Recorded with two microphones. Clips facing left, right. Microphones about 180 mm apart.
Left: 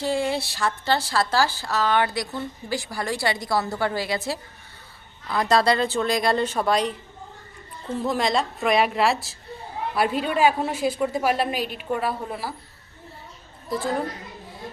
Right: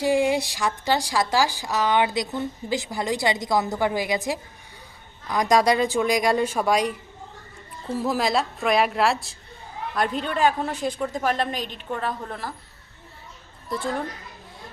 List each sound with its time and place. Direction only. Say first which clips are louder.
0.0 s speech: right 4 dB; 15° right (ahead or behind)
7.9 s a woman's voice: even; 5° right (ahead or behind)
13.7 s a woman's voice: left 1 dB; centre (ahead or behind)